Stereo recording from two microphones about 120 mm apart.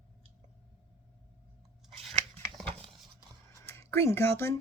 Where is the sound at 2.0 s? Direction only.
5° left (ahead or behind).